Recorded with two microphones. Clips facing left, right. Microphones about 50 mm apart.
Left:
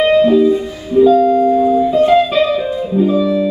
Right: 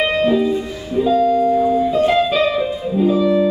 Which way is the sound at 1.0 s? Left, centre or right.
Centre.